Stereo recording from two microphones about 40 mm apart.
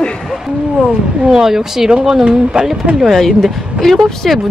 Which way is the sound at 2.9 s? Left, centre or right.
Right.